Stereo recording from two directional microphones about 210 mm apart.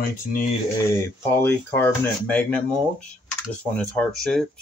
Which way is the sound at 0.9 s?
10° left (ahead or behind).